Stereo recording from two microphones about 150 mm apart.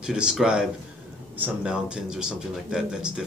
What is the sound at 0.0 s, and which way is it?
Speech, 5° right (ahead or behind).